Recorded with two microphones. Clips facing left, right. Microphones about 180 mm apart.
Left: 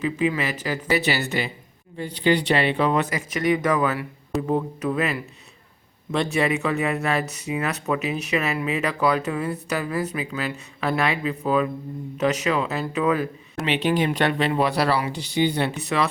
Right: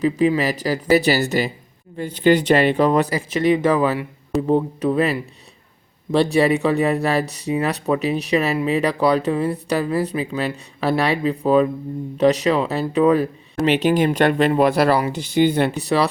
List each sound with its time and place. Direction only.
0.0 s speech: 35° right (ahead or behind)
15.7 s speech: 35° right (ahead or behind)